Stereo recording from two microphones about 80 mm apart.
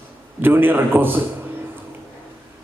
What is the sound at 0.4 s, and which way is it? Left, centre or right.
Speech, right.